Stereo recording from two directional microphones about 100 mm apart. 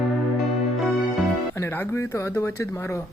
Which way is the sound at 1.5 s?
25° left (ahead or behind).